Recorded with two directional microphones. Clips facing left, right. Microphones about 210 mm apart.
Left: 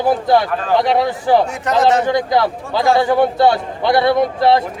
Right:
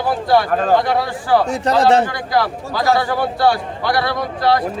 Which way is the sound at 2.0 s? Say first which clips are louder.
Left 4 dB; 20° left (ahead or behind).